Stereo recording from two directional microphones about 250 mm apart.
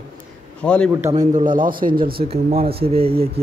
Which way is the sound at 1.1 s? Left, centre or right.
Right.